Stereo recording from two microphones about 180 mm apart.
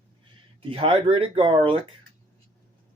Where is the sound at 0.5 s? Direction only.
30° right (ahead or behind).